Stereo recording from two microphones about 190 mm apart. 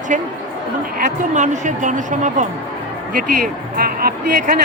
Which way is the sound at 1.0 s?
40° right (ahead or behind).